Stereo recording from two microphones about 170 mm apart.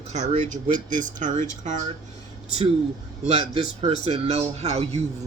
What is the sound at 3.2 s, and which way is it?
Speech, 40° right (ahead or behind).